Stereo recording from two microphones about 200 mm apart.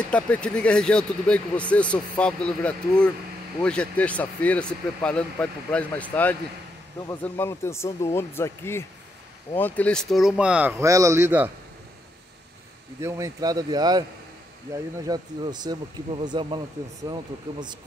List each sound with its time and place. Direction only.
0.1 s speech: 5° left (ahead or behind); by 11.5 s 10° right (ahead or behind)
13.0 s speech: 15° right (ahead or behind)